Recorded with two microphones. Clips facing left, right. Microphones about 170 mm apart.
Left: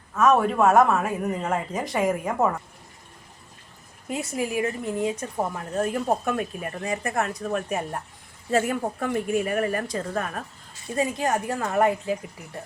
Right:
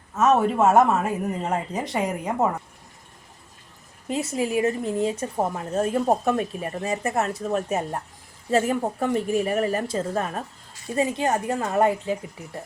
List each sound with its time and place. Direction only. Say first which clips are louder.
0.2 s speech: even; 25° right (ahead or behind)
4.4 s speech: right 3 dB; 30° right (ahead or behind)